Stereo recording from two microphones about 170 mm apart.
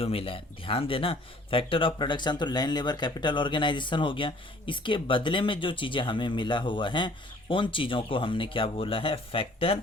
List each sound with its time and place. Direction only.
0.0 s speech: 35° left (ahead or behind)